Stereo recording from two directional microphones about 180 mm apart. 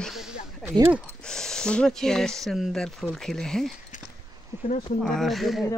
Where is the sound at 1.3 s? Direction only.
5° left (ahead or behind).